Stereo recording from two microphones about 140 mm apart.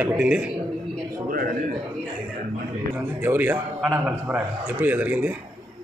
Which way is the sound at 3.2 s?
15° right (ahead or behind).